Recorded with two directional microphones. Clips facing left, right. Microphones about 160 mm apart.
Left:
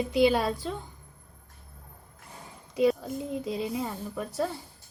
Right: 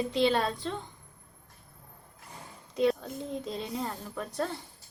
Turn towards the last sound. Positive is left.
turn(degrees=5)  # may be behind; listen again after turning